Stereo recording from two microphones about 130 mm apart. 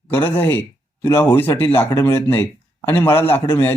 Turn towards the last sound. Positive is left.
turn(degrees=15)  # may be behind; listen again after turning